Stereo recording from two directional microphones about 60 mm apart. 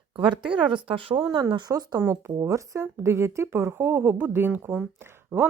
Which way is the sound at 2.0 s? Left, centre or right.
Right.